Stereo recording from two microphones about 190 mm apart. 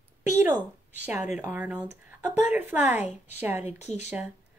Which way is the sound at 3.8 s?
35° left (ahead or behind).